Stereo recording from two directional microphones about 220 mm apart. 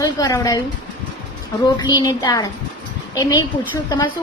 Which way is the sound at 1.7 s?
15° left (ahead or behind).